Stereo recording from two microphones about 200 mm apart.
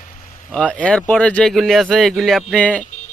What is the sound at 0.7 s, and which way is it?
Speech, 5° left (ahead or behind).